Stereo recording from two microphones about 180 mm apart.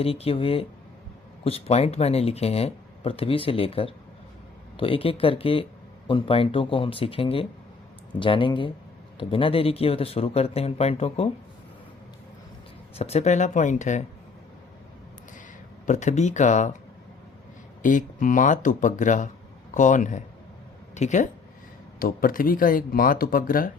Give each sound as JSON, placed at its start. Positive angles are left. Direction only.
{"t": 0.0, "sound": "speech", "side_deg": 30}
{"t": 13.0, "sound": "speech", "side_deg": 35}
{"t": 15.9, "sound": "speech", "side_deg": 40}
{"t": 17.8, "sound": "speech", "side_deg": 45}
{"t": 21.9, "sound": "speech", "side_deg": 55}